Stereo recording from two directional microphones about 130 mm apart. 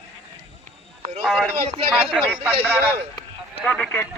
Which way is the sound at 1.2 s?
Centre (ahead or behind).